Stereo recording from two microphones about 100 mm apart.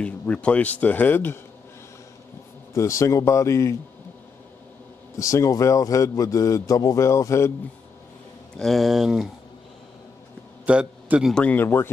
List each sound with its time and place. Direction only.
0.0 s speech: 10° left (ahead or behind)
2.7 s speech: 30° left (ahead or behind)
5.2 s speech: 35° left (ahead or behind)
8.5 s speech: centre (ahead or behind)
10.6 s a man's voice: 15° right (ahead or behind)
11.3 s speech: 15° left (ahead or behind)